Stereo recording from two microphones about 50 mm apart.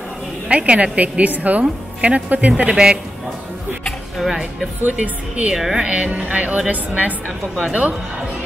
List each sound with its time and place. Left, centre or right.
0.5 s a woman's voice: right
4.3 s speech: centre
4.8 s speech: right
5.5 s speech: centre
5.8 s a woman's voice: right